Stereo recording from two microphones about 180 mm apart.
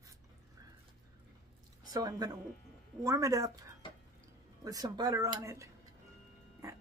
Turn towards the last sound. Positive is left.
turn(degrees=-15)  # may be behind; listen again after turning